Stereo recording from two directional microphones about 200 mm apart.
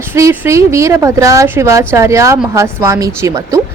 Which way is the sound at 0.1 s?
15° right (ahead or behind).